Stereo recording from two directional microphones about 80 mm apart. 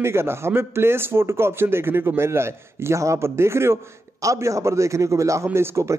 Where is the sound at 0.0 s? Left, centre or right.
Right.